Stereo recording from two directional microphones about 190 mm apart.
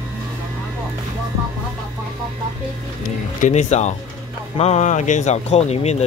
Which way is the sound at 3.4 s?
35° left (ahead or behind).